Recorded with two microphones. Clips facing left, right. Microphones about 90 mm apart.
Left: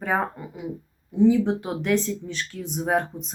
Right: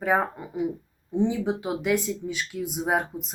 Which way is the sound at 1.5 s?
5° right (ahead or behind).